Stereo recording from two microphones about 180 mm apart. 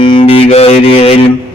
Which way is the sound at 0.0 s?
30° left (ahead or behind).